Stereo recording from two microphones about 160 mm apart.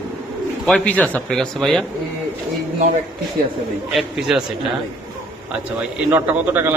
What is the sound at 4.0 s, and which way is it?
Speech, centre (ahead or behind).